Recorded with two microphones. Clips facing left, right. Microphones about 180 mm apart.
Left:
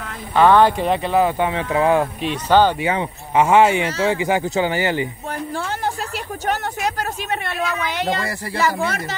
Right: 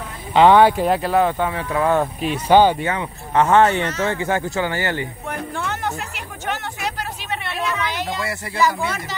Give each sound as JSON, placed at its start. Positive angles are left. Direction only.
{"t": 0.3, "sound": "speech", "side_deg": -20}
{"t": 1.4, "sound": "speech", "side_deg": 20}
{"t": 2.2, "sound": "speech", "side_deg": -10}
{"t": 2.8, "sound": "speech", "side_deg": 15}
{"t": 5.3, "sound": "a sound", "side_deg": 35}
{"t": 8.5, "sound": "speech", "side_deg": 60}